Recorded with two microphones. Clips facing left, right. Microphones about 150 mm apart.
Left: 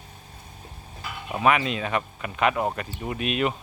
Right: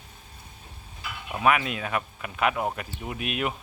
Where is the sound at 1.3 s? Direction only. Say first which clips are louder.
Left 2 dB; centre (ahead or behind).